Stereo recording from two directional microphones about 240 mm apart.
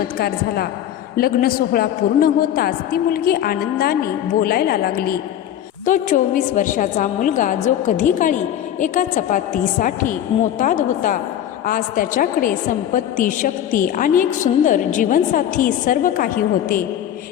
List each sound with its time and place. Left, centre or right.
0.2 s a woman's voice: left